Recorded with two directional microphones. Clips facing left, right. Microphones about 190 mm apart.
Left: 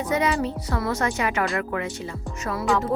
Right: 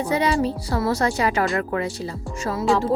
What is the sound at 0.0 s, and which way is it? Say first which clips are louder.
Speech: right 2 dB; 30° right (ahead or behind).